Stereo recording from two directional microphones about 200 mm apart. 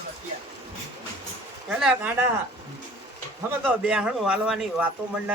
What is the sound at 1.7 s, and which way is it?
Speech, 5° right (ahead or behind).